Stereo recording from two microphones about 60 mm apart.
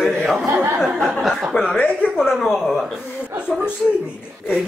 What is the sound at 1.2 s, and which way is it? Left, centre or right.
Speech, centre.